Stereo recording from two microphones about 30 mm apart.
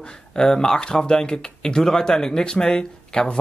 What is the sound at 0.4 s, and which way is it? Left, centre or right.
Speech, left.